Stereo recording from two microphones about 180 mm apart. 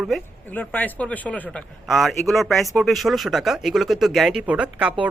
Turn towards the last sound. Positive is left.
turn(degrees=-5)  # may be behind; listen again after turning